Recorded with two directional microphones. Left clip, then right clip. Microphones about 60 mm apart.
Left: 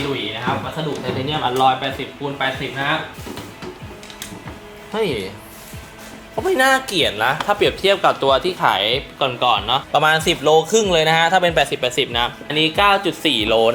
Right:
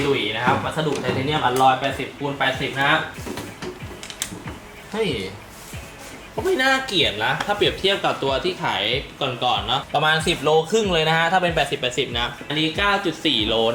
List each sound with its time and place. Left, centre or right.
0.1 s speech: centre
6.6 s speech: left